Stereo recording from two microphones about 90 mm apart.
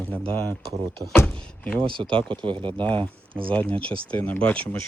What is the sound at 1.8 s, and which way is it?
Speech, 65° right (ahead or behind).